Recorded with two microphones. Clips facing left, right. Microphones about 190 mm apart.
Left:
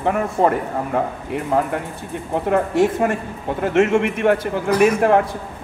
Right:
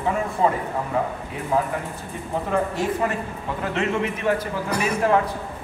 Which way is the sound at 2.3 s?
65° left (ahead or behind).